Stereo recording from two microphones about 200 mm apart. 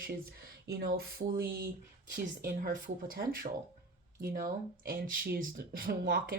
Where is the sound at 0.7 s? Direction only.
50° right (ahead or behind).